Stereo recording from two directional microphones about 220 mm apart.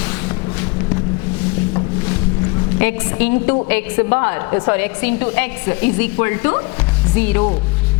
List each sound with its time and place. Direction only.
2.7 s a woman's voice: 10° left (ahead or behind)